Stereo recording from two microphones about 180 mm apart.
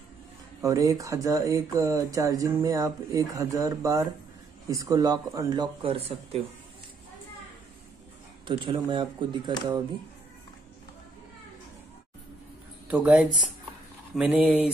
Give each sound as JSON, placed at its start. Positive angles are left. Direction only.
{"t": 0.6, "sound": "speech", "side_deg": -20}
{"t": 8.5, "sound": "speech", "side_deg": -25}
{"t": 12.8, "sound": "speech", "side_deg": -10}